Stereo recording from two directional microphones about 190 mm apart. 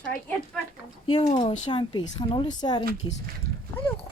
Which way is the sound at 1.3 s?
25° left (ahead or behind).